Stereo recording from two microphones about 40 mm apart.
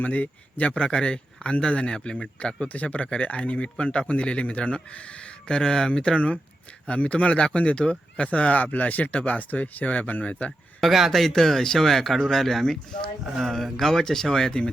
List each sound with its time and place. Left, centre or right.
0.0 s speech: left
0.7 s speech: left
2.6 s speech: left
10.8 s speech: centre
13.2 s speech: centre